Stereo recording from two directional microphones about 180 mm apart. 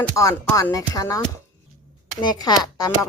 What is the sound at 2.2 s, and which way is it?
Speech, 20° left (ahead or behind).